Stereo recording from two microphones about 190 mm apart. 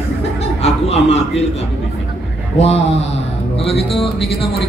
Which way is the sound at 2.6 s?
35° left (ahead or behind).